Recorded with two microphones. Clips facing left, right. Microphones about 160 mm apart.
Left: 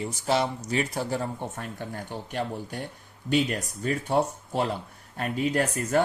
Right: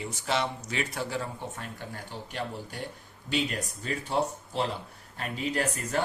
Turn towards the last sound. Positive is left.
turn(degrees=45)  # may be behind; listen again after turning